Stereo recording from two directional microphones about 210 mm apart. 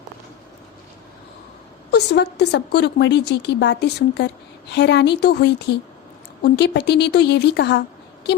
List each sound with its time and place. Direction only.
1.9 s a woman's voice: 50° left (ahead or behind)